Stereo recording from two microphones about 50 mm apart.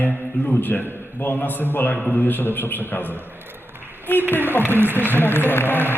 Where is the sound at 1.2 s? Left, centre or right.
Left.